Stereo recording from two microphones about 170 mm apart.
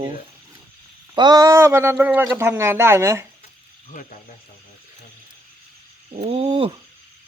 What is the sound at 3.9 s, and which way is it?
Speech, 50° left (ahead or behind).